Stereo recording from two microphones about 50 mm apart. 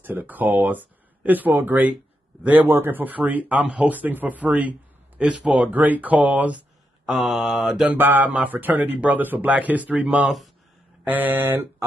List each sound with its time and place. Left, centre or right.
0.0 s speech: right
5.7 s speech: right
7.1 s speech: centre
7.4 s mantra: centre
8.0 s speech: right
11.1 s speech: right